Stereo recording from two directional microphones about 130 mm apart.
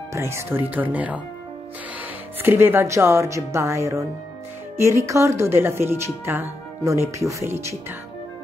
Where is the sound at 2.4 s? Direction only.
15° right (ahead or behind).